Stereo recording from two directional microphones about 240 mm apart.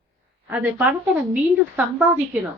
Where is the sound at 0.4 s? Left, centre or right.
Centre.